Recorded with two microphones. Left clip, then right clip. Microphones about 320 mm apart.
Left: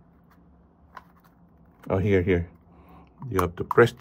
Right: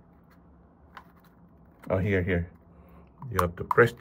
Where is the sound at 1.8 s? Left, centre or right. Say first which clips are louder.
Left 4 dB; centre.